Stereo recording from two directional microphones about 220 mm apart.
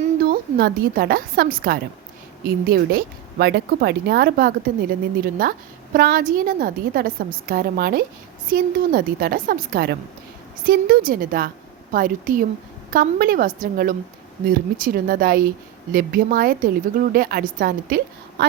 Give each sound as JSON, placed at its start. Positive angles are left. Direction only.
{"t": 0.2, "sound": "a woman's voice", "side_deg": -45}